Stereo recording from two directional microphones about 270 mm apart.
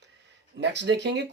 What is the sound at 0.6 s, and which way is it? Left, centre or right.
Speech, right.